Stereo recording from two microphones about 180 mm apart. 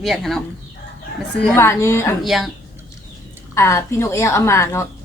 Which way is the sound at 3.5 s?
15° left (ahead or behind).